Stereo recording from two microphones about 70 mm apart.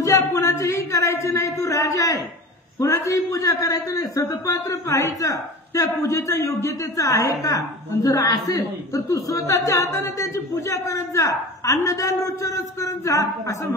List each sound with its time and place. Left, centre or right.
0.0 s a man's voice: left